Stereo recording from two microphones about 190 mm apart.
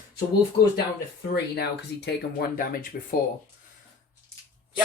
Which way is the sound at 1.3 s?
60° left (ahead or behind).